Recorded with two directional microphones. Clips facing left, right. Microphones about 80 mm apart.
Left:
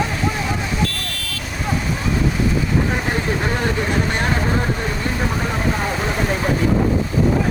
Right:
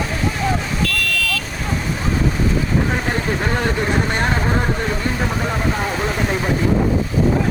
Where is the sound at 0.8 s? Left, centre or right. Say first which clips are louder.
Right 3 dB; left.